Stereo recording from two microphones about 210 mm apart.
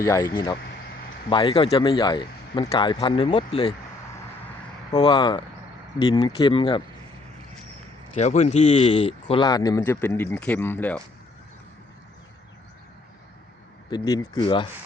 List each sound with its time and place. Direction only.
0.0 s speech: 15° left (ahead or behind)
1.3 s speech: 25° left (ahead or behind)
4.9 s speech: 20° left (ahead or behind)
8.2 s speech: 35° left (ahead or behind); by 11.0 s 10° left (ahead or behind)
13.9 s speech: 20° left (ahead or behind)